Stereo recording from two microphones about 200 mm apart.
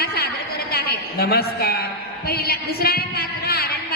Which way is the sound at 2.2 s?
50° left (ahead or behind).